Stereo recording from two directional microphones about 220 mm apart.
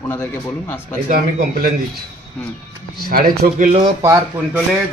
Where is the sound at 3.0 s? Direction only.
40° right (ahead or behind).